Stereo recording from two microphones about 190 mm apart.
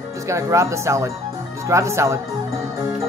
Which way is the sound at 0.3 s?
15° right (ahead or behind).